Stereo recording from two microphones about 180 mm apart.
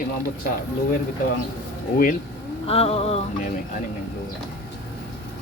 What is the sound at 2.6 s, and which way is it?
Music, 35° left (ahead or behind).